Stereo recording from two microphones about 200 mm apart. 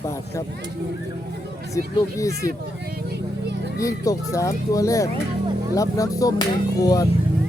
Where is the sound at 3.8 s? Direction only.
15° left (ahead or behind).